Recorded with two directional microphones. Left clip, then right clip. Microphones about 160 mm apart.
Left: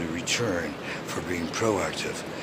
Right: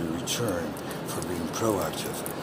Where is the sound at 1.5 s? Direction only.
5° right (ahead or behind).